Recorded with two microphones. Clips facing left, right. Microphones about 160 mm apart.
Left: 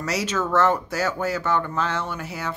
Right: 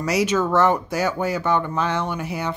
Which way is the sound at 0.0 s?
10° right (ahead or behind).